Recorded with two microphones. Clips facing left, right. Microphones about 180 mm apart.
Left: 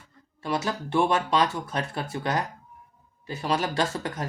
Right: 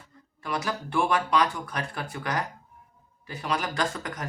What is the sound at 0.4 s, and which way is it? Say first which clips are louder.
Speech: left 3 dB; 25° left (ahead or behind).